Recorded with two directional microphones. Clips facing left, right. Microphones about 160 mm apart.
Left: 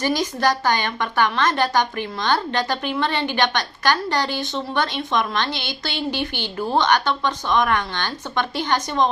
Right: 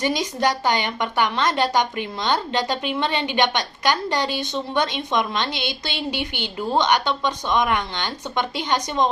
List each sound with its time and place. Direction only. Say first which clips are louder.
0.0 s a woman's voice: left 1 dB; 20° right (ahead or behind)